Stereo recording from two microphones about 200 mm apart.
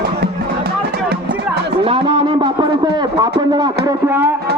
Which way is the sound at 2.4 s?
20° right (ahead or behind).